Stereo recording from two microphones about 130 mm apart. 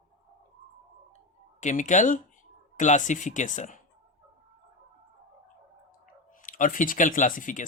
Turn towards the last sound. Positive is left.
turn(degrees=90)